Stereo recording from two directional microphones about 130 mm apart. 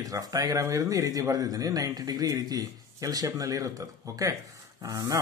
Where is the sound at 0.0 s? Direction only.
25° right (ahead or behind).